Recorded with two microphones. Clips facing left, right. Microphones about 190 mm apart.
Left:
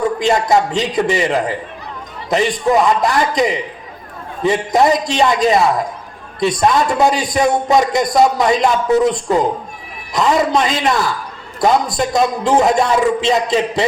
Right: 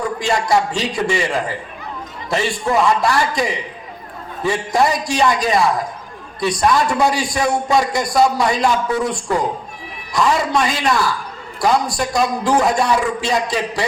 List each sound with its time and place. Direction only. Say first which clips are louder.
0.2 s a man's voice: left 1 dB; 20° left (ahead or behind)